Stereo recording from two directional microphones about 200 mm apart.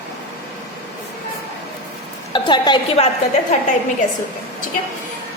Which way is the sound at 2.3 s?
25° left (ahead or behind).